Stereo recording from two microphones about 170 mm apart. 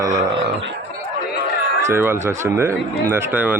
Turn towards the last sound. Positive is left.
turn(degrees=-10)  # may be behind; listen again after turning